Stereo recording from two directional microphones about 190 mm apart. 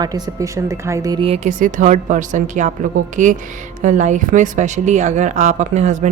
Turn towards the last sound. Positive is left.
turn(degrees=-40)  # may be behind; listen again after turning